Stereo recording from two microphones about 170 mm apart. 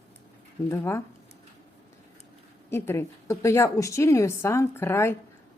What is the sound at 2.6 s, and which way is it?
Speech, 15° left (ahead or behind).